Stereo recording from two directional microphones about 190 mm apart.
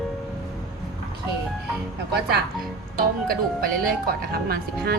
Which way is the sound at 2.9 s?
50° right (ahead or behind).